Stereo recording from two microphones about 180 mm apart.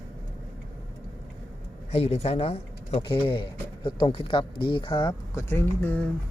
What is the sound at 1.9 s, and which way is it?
Speech, 35° left (ahead or behind).